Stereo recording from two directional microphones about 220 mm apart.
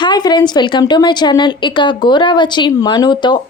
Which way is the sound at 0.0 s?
20° left (ahead or behind).